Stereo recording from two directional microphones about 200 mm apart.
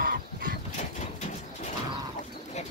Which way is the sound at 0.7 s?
35° left (ahead or behind).